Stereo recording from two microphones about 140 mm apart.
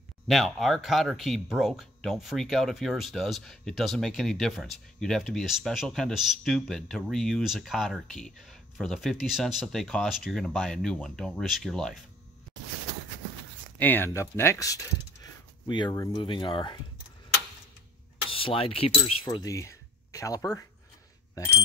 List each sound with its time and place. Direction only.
0.3 s speech: centre (ahead or behind)
13.7 s speech: 15° left (ahead or behind)
15.6 s speech: 35° left (ahead or behind)
18.3 s a sound: 40° left (ahead or behind)
19.2 s speech: 25° left (ahead or behind)